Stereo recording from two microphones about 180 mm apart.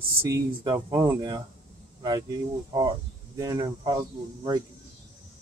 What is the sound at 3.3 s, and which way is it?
Speech, 20° right (ahead or behind).